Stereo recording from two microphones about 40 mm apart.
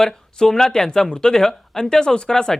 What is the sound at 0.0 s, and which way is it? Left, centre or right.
Speech, centre.